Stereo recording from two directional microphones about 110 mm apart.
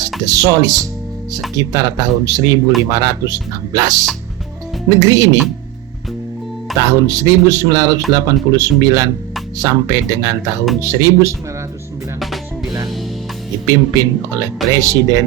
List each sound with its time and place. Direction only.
0.3 s speech: 30° right (ahead or behind)
6.7 s speech: 30° right (ahead or behind)
13.7 s speech: 30° right (ahead or behind)